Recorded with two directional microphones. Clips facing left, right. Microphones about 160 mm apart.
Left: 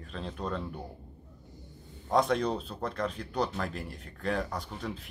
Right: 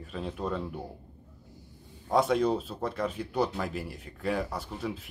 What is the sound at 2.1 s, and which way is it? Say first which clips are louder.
Speech: right 2 dB; 5° right (ahead or behind).